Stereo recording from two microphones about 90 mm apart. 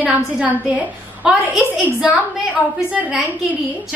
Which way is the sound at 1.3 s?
5° right (ahead or behind).